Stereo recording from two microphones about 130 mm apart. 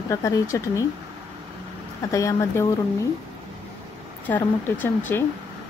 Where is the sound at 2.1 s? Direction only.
25° left (ahead or behind).